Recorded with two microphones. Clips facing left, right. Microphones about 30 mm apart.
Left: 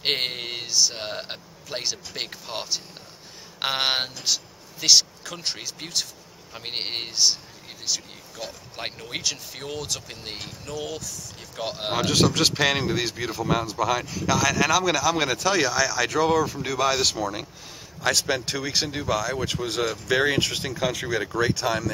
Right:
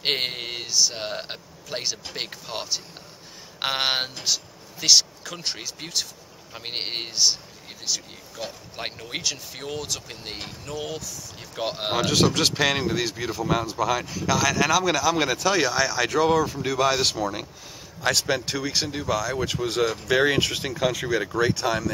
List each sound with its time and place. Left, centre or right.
0.0 s speech: centre
15.7 s speech: centre
16.1 s speech: centre